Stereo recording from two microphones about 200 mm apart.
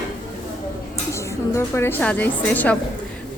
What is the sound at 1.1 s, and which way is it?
A woman's voice, 15° left (ahead or behind).